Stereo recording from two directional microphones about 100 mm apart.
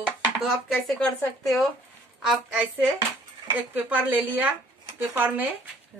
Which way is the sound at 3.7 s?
15° right (ahead or behind).